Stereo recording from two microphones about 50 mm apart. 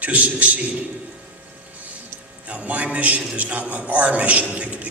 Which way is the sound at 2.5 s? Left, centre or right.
Right.